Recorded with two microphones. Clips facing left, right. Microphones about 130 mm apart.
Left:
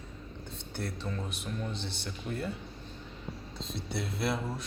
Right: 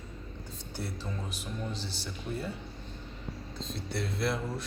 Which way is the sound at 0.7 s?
5° right (ahead or behind).